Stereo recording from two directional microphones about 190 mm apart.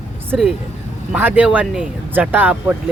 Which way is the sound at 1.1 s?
10° right (ahead or behind).